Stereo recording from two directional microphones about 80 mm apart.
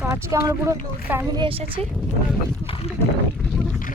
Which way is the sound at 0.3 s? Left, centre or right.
Right.